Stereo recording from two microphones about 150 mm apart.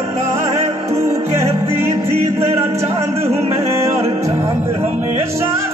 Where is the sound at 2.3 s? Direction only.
20° right (ahead or behind).